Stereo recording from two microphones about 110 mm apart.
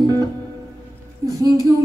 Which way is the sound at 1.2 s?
30° right (ahead or behind).